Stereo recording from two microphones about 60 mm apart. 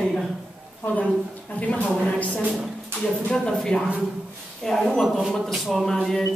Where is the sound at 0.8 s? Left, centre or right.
Left.